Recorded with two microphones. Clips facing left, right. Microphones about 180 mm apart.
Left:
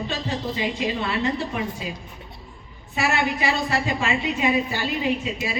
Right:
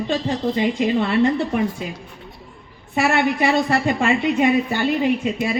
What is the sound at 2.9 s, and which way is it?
A woman's voice, 55° right (ahead or behind).